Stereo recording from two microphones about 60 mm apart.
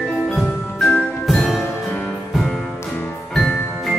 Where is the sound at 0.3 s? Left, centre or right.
Centre.